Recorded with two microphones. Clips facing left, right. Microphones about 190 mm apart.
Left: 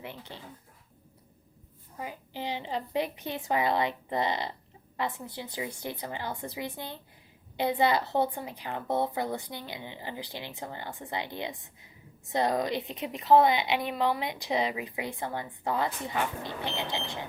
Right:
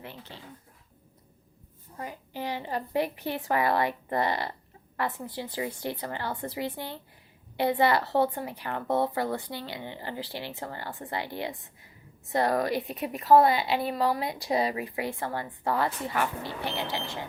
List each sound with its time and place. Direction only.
0.0 s a woman's voice: 15° left (ahead or behind)
2.0 s a woman's voice: 15° left (ahead or behind)
13.7 s a woman's voice: 35° right (ahead or behind)
14.1 s a woman's voice: 20° left (ahead or behind)